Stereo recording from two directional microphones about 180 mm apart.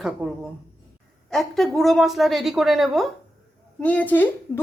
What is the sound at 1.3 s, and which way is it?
Speech, centre (ahead or behind).